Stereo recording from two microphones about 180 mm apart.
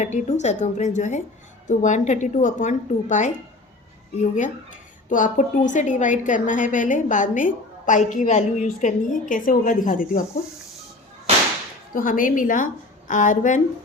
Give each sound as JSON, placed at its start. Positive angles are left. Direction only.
{"t": 0.0, "sound": "a woman's voice", "side_deg": 40}
{"t": 5.0, "sound": "a woman's voice", "side_deg": 45}
{"t": 11.9, "sound": "a woman's voice", "side_deg": 50}